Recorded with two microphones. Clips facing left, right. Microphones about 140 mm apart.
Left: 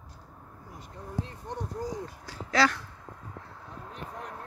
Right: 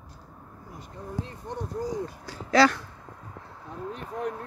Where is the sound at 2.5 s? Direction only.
35° right (ahead or behind).